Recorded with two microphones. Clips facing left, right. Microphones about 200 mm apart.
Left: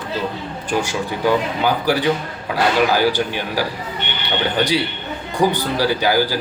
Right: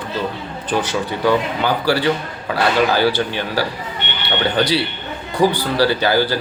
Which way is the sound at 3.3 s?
10° left (ahead or behind).